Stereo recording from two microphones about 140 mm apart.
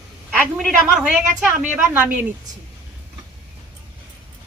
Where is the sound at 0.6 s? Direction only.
5° right (ahead or behind).